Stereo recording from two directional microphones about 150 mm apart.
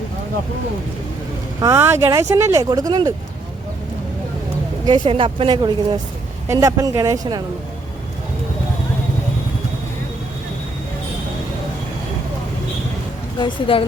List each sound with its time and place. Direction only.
1.6 s speech: 15° right (ahead or behind)
4.9 s speech: 30° right (ahead or behind)
13.4 s speech: 35° left (ahead or behind)